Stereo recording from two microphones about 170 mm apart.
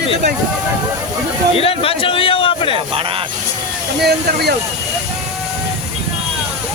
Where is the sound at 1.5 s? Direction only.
35° left (ahead or behind).